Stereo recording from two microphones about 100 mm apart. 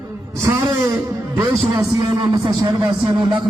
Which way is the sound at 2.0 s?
45° right (ahead or behind).